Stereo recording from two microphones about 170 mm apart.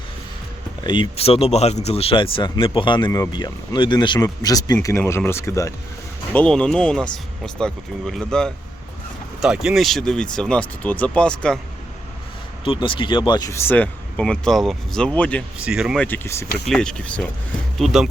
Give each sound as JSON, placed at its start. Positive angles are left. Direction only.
{"t": 0.9, "sound": "speech", "side_deg": 30}
{"t": 6.3, "sound": "speech", "side_deg": 5}
{"t": 12.6, "sound": "speech", "side_deg": 30}
{"t": 15.5, "sound": "speech", "side_deg": -5}
{"t": 16.0, "sound": "speech", "side_deg": 10}
{"t": 16.6, "sound": "speech", "side_deg": 5}